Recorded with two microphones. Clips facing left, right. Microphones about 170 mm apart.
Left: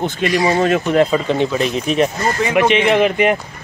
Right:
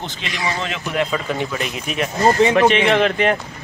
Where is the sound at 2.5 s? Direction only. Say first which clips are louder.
Left 1 dB; 15° left (ahead or behind).